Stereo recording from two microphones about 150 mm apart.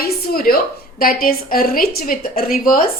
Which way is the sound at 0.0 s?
85° left.